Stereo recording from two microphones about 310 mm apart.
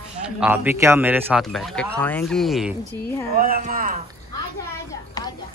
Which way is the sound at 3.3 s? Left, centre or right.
Right.